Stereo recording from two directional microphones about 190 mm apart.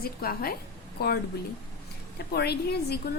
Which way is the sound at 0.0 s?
50° left (ahead or behind).